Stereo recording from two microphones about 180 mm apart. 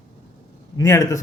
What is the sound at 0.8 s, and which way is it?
Speech, 20° left (ahead or behind).